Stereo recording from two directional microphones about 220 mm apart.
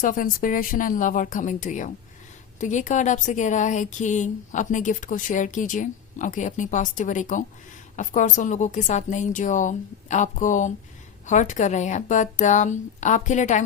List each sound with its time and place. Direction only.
0.0 s speech: 40° left (ahead or behind)